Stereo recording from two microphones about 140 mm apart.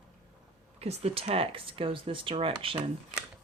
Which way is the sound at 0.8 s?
50° right (ahead or behind).